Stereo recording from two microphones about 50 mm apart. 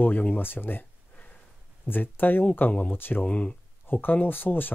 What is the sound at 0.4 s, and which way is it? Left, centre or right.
Speech, left.